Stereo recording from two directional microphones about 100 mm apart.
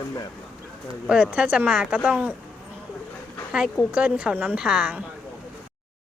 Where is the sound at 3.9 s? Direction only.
10° right (ahead or behind).